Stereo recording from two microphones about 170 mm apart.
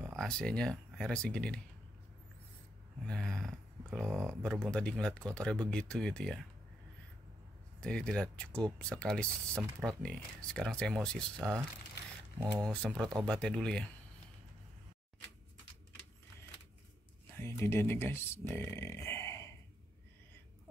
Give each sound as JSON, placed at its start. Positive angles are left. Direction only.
{"t": 0.0, "sound": "speech", "side_deg": 0}
{"t": 3.1, "sound": "a sound", "side_deg": 5}
{"t": 4.4, "sound": "speech", "side_deg": 5}
{"t": 7.8, "sound": "speech", "side_deg": 5}
{"t": 12.4, "sound": "speech", "side_deg": -20}
{"t": 12.7, "sound": "speech", "side_deg": 5}
{"t": 17.3, "sound": "speech", "side_deg": 15}